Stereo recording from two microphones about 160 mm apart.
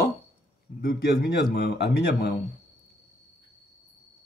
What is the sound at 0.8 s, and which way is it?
A man's voice, 70° left (ahead or behind).